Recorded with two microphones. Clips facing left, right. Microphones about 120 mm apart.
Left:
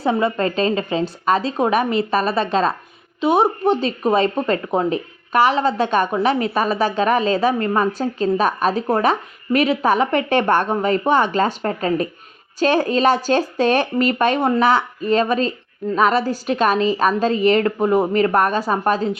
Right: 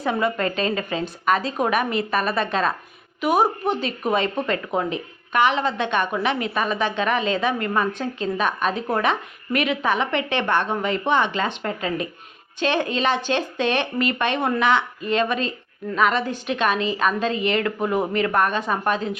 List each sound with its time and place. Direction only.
0.0 s a woman's voice: 30° left (ahead or behind)